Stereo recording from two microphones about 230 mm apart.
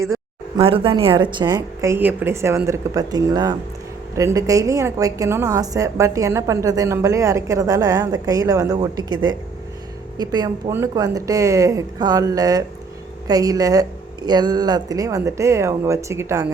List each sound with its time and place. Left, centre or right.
0.5 s a woman's voice: right